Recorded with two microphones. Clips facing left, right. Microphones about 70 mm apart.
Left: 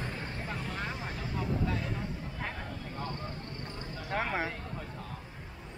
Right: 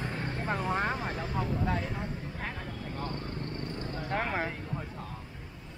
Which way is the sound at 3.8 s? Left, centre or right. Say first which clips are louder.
Right 5 dB; right.